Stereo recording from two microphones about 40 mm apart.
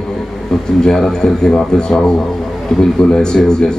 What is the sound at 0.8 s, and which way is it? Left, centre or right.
A man's voice, centre.